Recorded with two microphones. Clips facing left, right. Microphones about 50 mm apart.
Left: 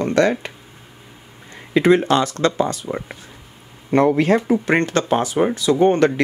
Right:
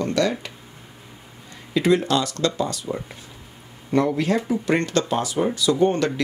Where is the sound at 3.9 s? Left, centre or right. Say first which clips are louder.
Left 5 dB; left.